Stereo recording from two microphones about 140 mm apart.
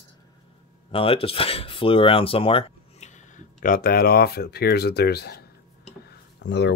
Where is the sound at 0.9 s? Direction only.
40° left (ahead or behind).